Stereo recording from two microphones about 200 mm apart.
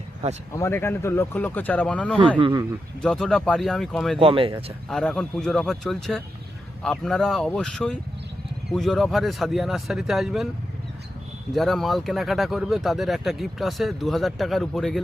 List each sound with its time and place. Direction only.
0.5 s speech: 15° left (ahead or behind)
4.2 s speech: 25° right (ahead or behind)
4.9 s speech: centre (ahead or behind)
11.5 s speech: centre (ahead or behind)